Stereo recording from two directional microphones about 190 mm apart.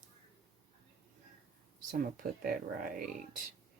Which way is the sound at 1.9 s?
45° right (ahead or behind).